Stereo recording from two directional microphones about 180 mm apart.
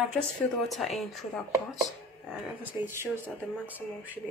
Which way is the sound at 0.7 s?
Centre (ahead or behind).